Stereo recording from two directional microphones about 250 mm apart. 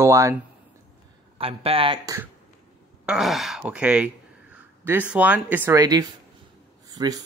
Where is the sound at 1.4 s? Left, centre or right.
Right.